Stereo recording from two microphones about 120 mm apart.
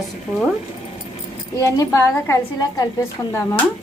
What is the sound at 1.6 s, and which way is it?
A woman's voice, 25° left (ahead or behind).